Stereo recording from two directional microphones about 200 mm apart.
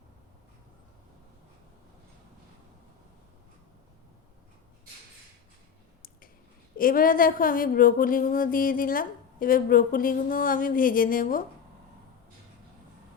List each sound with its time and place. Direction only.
6.7 s speech: 45° left (ahead or behind)